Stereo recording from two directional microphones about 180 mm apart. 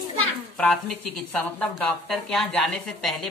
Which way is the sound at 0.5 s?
Centre (ahead or behind).